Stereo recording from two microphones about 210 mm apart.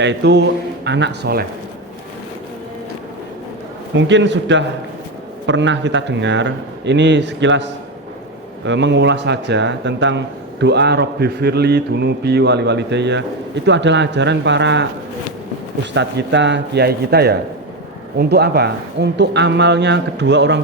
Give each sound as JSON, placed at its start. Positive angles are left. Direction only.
{"t": 0.0, "sound": "speech", "side_deg": -55}
{"t": 3.9, "sound": "speech", "side_deg": -60}
{"t": 16.0, "sound": "speech", "side_deg": -55}